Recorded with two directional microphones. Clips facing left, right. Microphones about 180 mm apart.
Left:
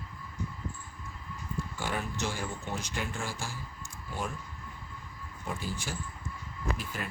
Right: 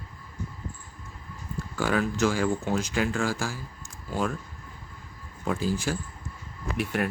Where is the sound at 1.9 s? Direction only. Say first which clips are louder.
Right 12 dB; 90° right.